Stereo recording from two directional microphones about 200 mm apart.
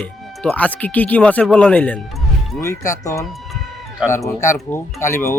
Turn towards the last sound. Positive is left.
turn(degrees=15)  # may be behind; listen again after turning